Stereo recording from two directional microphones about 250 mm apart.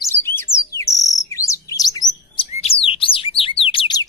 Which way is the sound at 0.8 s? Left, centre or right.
Centre.